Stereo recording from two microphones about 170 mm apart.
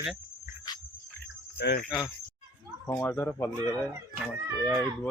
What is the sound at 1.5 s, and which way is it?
Cricket, 75° left (ahead or behind).